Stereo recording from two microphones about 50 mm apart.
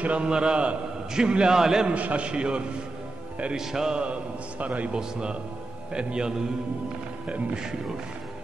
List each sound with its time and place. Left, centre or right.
0.0 s a man's voice: right; by 1.9 s centre
1.9 s a man's voice: right
3.5 s a man's voice: centre; by 4.9 s right
4.9 s a man's voice: centre
7.5 s a man's voice: centre